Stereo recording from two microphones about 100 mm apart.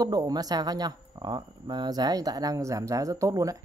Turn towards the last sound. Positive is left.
turn(degrees=-35)  # may be behind; listen again after turning